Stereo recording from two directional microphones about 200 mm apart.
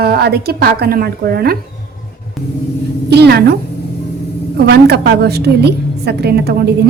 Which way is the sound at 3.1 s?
55° right (ahead or behind).